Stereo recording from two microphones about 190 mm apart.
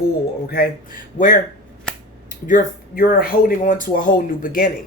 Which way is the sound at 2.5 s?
50° left (ahead or behind).